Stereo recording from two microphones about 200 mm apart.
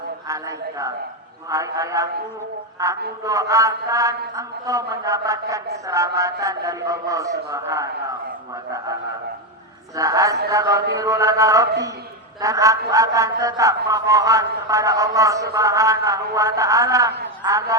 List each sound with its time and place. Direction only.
1.5 s a man's voice: 15° right (ahead or behind)
10.0 s a man's voice: 15° right (ahead or behind)